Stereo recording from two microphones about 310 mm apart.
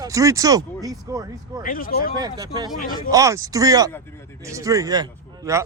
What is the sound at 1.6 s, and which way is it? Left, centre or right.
Speech, left.